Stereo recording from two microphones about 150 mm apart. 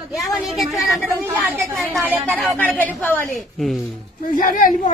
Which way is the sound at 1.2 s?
15° right (ahead or behind).